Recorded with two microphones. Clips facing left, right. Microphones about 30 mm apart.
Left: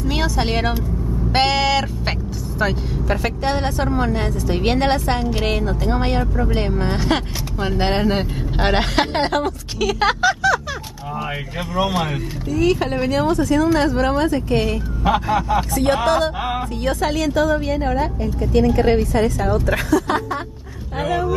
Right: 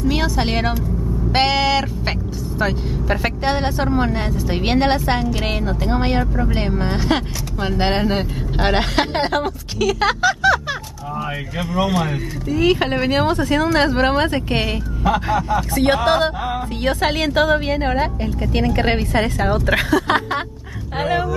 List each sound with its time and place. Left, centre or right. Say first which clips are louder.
0.0 s speech: right 2 dB; centre
3.1 s speech: right 1 dB; centre
11.8 s speech: even; centre
12.4 s a woman's voice: right 1 dB; right
15.0 s speech: even; centre
15.7 s music: right 2 dB; right
16.8 s a woman's voice: right 2 dB; right
21.0 s speech: right 1 dB; right